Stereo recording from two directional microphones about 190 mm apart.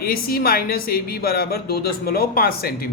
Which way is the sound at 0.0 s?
55° left (ahead or behind).